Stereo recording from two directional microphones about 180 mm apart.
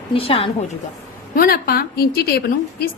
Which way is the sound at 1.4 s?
55° left (ahead or behind).